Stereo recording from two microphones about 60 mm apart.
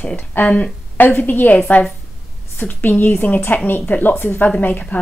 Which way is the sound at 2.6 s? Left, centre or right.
Left.